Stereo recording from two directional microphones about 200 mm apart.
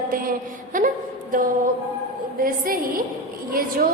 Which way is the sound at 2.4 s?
45° right (ahead or behind).